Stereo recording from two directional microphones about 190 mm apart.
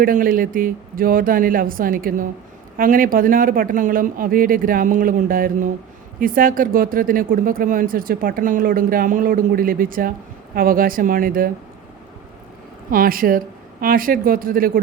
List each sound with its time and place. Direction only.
0.0 s speech: 45° right (ahead or behind)
12.9 s speech: 45° right (ahead or behind)